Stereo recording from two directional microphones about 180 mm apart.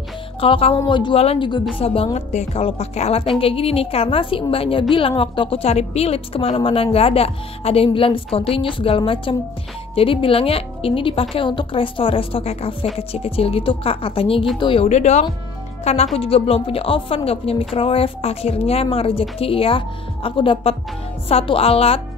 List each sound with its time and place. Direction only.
0.4 s a woman's voice: 30° left (ahead or behind)